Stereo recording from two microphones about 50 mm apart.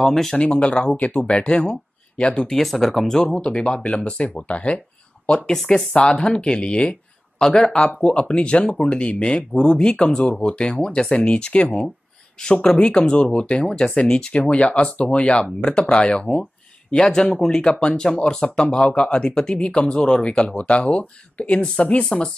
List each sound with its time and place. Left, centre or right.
0.0 s speech: centre
0.4 s speech: centre
2.5 s speech: centre
3.5 s speech: centre